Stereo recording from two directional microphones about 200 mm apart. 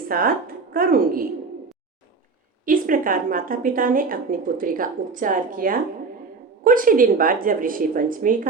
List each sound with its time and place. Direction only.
0.1 s a woman's voice: 45° right (ahead or behind)
2.6 s a woman's voice: 45° right (ahead or behind)